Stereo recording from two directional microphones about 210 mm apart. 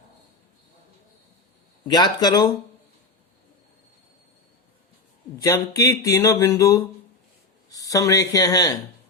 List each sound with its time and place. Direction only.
1.9 s speech: 20° left (ahead or behind)
5.4 s speech: 15° left (ahead or behind)